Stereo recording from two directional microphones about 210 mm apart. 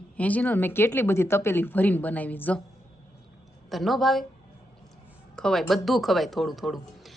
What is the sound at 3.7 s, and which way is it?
Speech, centre (ahead or behind).